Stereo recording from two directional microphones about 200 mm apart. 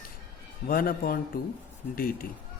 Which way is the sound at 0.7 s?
45° left (ahead or behind).